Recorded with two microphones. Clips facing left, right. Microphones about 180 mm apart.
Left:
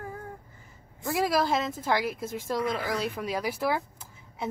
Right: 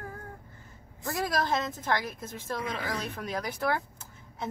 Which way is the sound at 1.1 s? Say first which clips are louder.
Left 4 dB; 10° left (ahead or behind).